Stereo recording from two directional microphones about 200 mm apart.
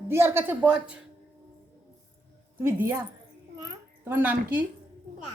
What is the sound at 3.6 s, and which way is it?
A child's voice, 10° right (ahead or behind).